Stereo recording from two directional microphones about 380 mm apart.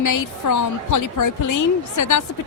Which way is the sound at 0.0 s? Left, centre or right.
Left.